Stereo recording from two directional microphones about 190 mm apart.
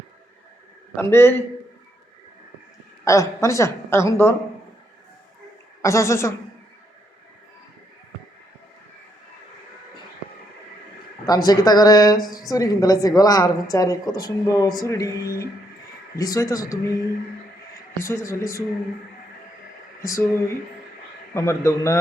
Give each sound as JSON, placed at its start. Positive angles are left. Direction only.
{"t": 0.9, "sound": "a woman's voice", "side_deg": 10}
{"t": 3.0, "sound": "a woman's voice", "side_deg": 15}
{"t": 5.8, "sound": "a woman's voice", "side_deg": 15}
{"t": 11.3, "sound": "a woman's voice", "side_deg": 20}
{"t": 20.0, "sound": "speech", "side_deg": 15}
{"t": 21.3, "sound": "a woman's voice", "side_deg": 15}